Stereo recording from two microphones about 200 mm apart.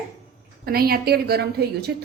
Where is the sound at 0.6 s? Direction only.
50° right (ahead or behind).